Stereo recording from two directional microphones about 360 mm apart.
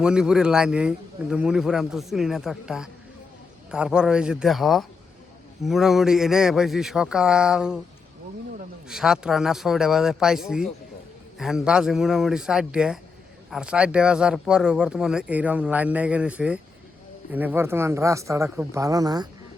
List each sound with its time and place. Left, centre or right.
0.0 s speech: centre
8.9 s speech: centre